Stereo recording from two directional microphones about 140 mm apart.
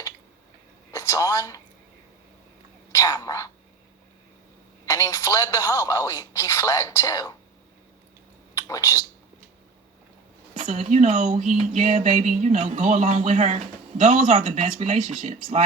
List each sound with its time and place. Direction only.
0.9 s speech: 20° left (ahead or behind)
2.9 s speech: 20° left (ahead or behind)
4.9 s speech: 20° left (ahead or behind)
8.6 s speech: 20° left (ahead or behind)
10.6 s music: 50° right (ahead or behind)